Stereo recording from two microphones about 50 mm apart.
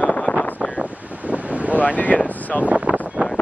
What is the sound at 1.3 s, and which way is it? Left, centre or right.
Wind noise, right.